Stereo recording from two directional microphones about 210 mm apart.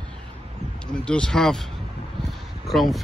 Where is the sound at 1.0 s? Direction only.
5° left (ahead or behind).